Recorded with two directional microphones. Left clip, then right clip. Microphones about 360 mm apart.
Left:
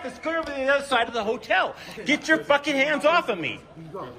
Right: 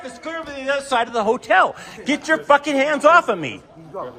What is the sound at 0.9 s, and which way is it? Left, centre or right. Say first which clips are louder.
A man's voice: right 5 dB; right.